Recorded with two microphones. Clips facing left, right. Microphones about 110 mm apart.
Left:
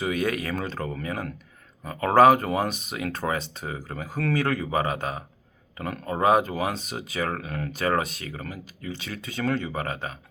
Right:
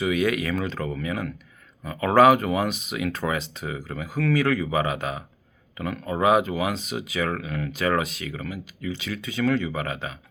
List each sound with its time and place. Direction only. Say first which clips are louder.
0.0 s speech: right 3 dB; 40° left (ahead or behind)